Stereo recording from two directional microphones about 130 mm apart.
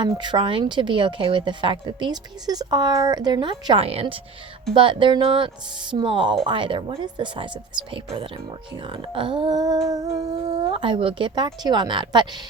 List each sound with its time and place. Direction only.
0.0 s a woman's voice: 35° right (ahead or behind)
9.9 s humming: 30° right (ahead or behind)
10.6 s a woman's voice: 40° right (ahead or behind)